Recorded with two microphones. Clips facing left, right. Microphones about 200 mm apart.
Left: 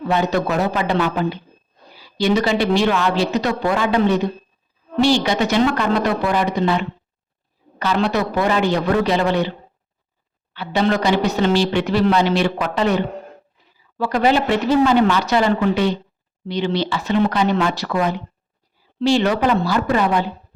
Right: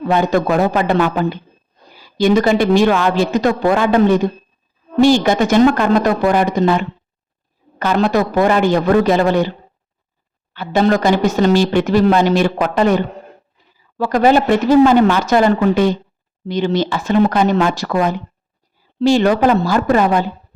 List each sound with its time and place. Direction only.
0.1 s speech: 50° right (ahead or behind)
10.5 s speech: 45° right (ahead or behind)